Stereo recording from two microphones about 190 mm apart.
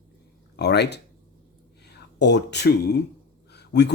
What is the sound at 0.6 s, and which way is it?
Speech, 60° left (ahead or behind).